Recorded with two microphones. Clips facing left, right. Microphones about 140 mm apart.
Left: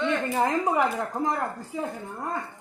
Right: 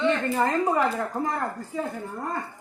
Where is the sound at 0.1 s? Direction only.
10° left (ahead or behind).